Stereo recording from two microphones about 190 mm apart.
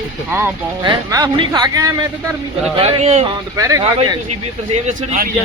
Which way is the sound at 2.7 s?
35° right (ahead or behind).